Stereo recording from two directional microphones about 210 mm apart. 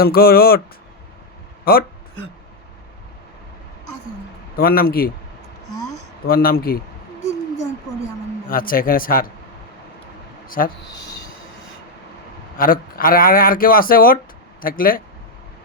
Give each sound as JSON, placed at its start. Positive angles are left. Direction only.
{"t": 0.0, "sound": "speech", "side_deg": 45}
{"t": 1.7, "sound": "speech", "side_deg": 45}
{"t": 4.5, "sound": "speech", "side_deg": 45}
{"t": 6.2, "sound": "speech", "side_deg": 45}
{"t": 8.4, "sound": "speech", "side_deg": 40}
{"t": 10.6, "sound": "speech", "side_deg": 45}
{"t": 12.5, "sound": "speech", "side_deg": 40}